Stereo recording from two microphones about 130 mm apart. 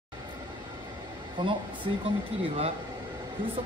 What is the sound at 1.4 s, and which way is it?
Speech, 40° right (ahead or behind).